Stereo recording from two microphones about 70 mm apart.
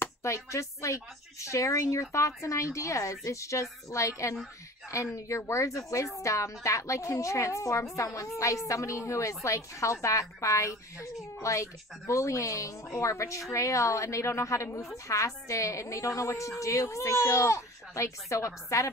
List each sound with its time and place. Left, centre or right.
0.2 s a woman's voice: left